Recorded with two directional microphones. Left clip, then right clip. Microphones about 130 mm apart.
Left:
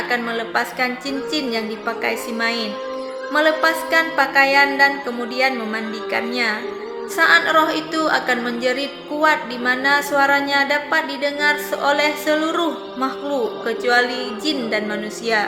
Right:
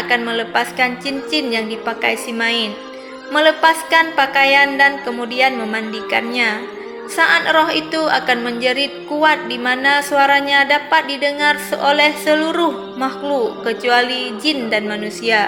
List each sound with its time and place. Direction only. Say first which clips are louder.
0.1 s a woman's voice: right 6 dB; 20° right (ahead or behind)